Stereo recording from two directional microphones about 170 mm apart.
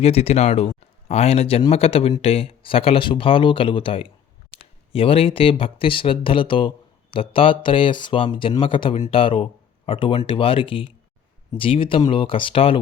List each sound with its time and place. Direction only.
0.0 s speech: 35° left (ahead or behind)
4.5 s a sound: 35° left (ahead or behind)
4.9 s speech: 35° left (ahead or behind)